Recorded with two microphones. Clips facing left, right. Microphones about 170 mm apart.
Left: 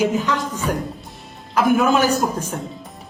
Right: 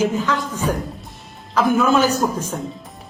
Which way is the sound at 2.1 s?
10° right (ahead or behind).